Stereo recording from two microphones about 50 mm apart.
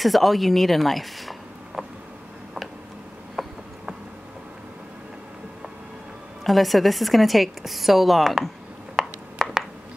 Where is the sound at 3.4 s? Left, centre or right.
Centre.